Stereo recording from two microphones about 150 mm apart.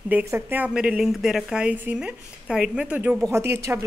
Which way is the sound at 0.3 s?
10° right (ahead or behind).